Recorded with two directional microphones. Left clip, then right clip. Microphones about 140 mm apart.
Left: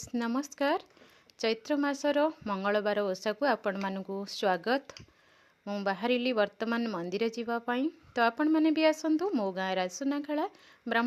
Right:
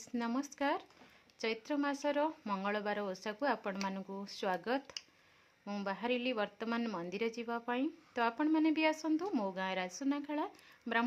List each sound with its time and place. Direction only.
0.0 s a woman's voice: 40° left (ahead or behind)